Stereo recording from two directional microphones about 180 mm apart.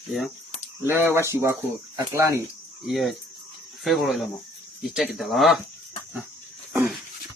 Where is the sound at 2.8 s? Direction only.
Centre (ahead or behind).